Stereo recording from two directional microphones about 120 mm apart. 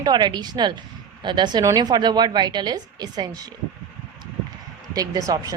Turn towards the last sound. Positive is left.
turn(degrees=-30)  # may be behind; listen again after turning